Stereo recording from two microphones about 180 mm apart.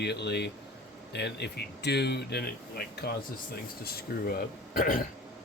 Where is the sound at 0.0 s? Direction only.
70° left (ahead or behind); by 5.0 s 50° left (ahead or behind).